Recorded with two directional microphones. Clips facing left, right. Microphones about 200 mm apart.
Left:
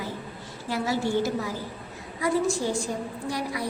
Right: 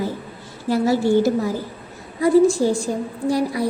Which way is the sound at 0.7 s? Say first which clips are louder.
Right 10 dB; 35° right (ahead or behind).